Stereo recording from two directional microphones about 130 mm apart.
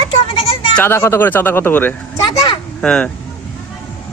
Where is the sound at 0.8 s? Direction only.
20° left (ahead or behind).